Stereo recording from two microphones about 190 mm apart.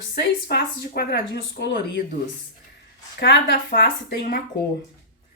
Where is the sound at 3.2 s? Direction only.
60° left (ahead or behind).